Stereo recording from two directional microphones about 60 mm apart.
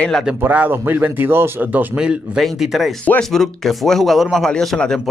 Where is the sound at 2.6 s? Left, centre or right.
Centre.